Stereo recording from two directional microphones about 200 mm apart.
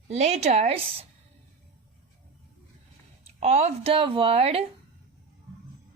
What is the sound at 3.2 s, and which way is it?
Speech, 35° right (ahead or behind).